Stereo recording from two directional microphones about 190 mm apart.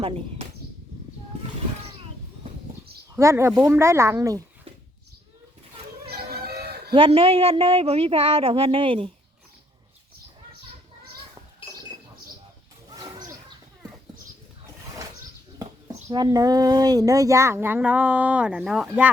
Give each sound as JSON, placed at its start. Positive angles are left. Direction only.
{"t": 0.0, "sound": "speech", "side_deg": -30}
{"t": 3.2, "sound": "speech", "side_deg": -15}
{"t": 6.1, "sound": "cat", "side_deg": -55}
{"t": 6.9, "sound": "speech", "side_deg": -30}
{"t": 12.9, "sound": "a sound", "side_deg": -20}
{"t": 16.0, "sound": "speech", "side_deg": -20}